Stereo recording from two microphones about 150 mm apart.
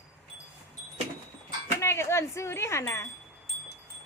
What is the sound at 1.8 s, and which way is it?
Wind chime, 15° left (ahead or behind).